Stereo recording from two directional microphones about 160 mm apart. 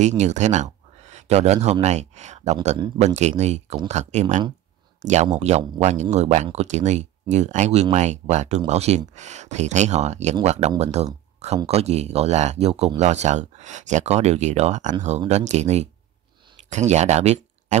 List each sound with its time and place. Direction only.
0.2 s speech: 45° right (ahead or behind)